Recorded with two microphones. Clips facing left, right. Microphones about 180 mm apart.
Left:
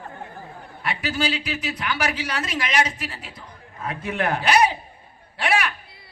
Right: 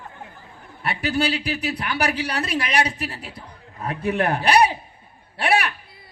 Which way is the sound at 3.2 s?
60° right (ahead or behind).